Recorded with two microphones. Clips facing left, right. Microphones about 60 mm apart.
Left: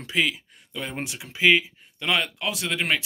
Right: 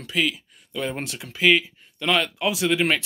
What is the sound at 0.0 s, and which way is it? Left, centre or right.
Speech, left.